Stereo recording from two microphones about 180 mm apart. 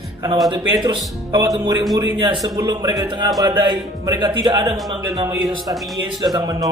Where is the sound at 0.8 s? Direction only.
25° right (ahead or behind).